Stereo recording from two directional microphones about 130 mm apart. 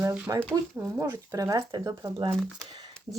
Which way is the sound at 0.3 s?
25° right (ahead or behind).